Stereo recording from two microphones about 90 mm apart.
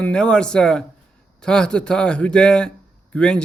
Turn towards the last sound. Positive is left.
turn(degrees=10)  # may be behind; listen again after turning